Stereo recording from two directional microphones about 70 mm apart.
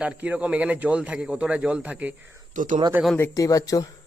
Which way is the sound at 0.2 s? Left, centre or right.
Centre.